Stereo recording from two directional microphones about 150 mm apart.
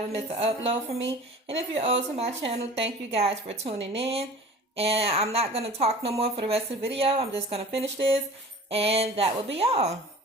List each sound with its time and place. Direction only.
0.1 s speech: 40° right (ahead or behind)